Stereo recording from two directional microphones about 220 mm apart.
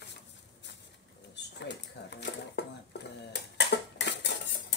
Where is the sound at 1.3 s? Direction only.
50° left (ahead or behind).